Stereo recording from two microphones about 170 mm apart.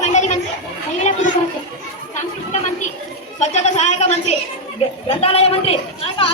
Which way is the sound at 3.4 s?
45° left (ahead or behind).